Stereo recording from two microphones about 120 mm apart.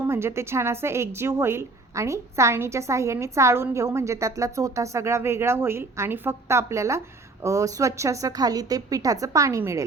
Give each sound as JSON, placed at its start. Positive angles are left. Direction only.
{"t": 0.0, "sound": "a woman's voice", "side_deg": -20}